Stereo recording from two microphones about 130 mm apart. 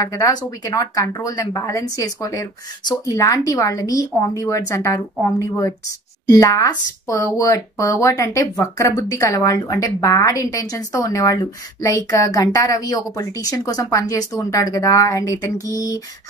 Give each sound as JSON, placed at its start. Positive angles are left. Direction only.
{"t": 0.0, "sound": "speech", "side_deg": 25}